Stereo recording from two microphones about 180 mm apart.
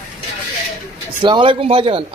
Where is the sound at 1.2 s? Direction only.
25° right (ahead or behind).